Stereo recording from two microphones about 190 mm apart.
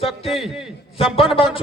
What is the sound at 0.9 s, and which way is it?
Speech, 30° left (ahead or behind).